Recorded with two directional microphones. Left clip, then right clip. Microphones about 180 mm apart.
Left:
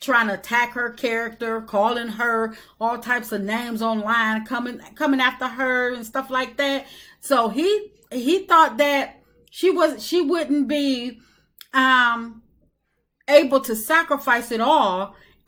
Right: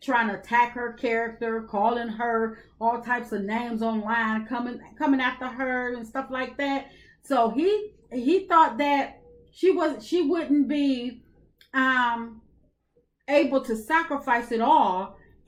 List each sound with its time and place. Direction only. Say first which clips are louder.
0.0 s a woman's voice: left 5 dB; 20° left (ahead or behind)
13.2 s a woman's voice: left 7 dB; 20° left (ahead or behind)